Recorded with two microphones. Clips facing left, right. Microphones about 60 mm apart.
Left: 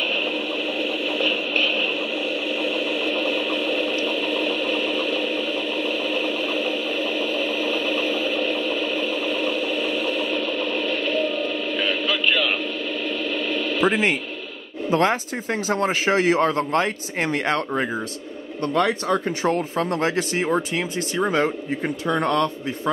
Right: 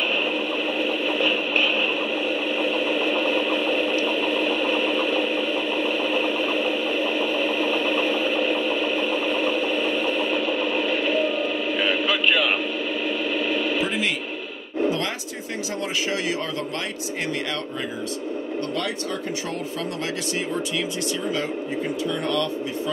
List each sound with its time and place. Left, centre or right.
0.7 s a sound: centre
13.8 s a man's voice: left
22.0 s a man's voice: left